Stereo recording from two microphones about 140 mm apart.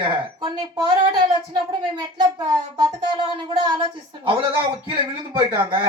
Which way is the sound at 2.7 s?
30° right (ahead or behind).